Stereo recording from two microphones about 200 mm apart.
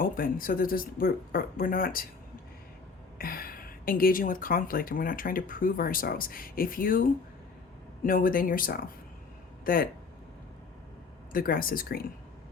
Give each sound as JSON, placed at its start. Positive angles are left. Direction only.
{"t": 0.0, "sound": "speech", "side_deg": 45}
{"t": 3.2, "sound": "speech", "side_deg": 45}
{"t": 8.0, "sound": "speech", "side_deg": 45}
{"t": 11.3, "sound": "speech", "side_deg": 45}